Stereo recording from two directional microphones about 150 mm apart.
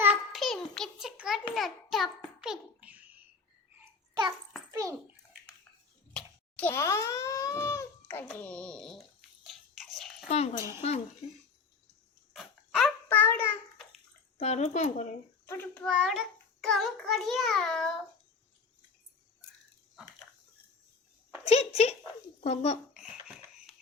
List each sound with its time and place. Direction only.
0.3 s a sound: centre (ahead or behind)
1.5 s a child's voice: centre (ahead or behind)
4.1 s a child's voice: 30° right (ahead or behind)
6.1 s a child's voice: 10° left (ahead or behind)
9.4 s chewing: centre (ahead or behind)
10.2 s speech: 45° left (ahead or behind)
12.3 s dog: centre (ahead or behind)
13.1 s child singing: 15° left (ahead or behind)
14.3 s speech: 50° left (ahead or behind)
15.4 s a child's voice: 15° left (ahead or behind)
15.8 s a child's voice: centre (ahead or behind)
21.4 s speech: 45° left (ahead or behind)
23.0 s a sound: 5° right (ahead or behind)